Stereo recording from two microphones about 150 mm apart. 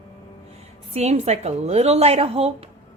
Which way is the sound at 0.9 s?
45° right (ahead or behind).